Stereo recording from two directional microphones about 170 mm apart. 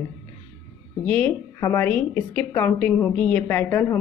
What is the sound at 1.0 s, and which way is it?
A woman's voice, 10° left (ahead or behind).